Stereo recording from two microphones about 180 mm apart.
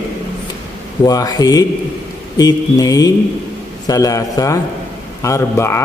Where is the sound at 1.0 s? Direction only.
20° left (ahead or behind).